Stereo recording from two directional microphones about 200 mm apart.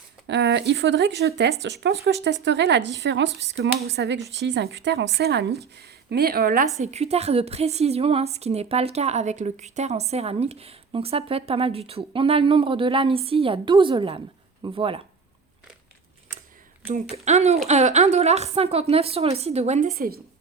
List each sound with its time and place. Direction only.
0.3 s speech: 60° right (ahead or behind)
6.8 s a woman's voice: 30° right (ahead or behind)
16.9 s a woman's voice: 35° right (ahead or behind)